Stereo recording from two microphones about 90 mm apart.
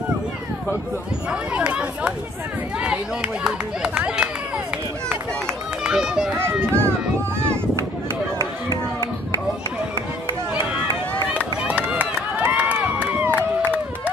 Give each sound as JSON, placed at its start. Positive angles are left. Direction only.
{"t": 1.5, "sound": "speech", "side_deg": -10}
{"t": 5.9, "sound": "run", "side_deg": -10}
{"t": 6.3, "sound": "a child's voice", "side_deg": -25}
{"t": 8.4, "sound": "run", "side_deg": 45}
{"t": 11.3, "sound": "run", "side_deg": -15}